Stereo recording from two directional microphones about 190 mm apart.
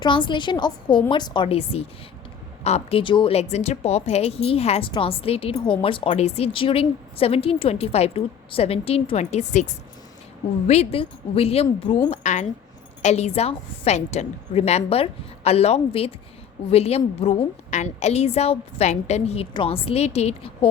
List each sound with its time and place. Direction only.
0.0 s a woman's voice: 25° left (ahead or behind)
10.7 s a woman's voice: 30° left (ahead or behind)